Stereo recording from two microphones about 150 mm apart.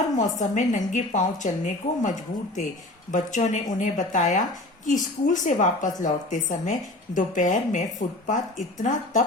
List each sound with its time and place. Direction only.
0.2 s a woman's voice: 55° left (ahead or behind)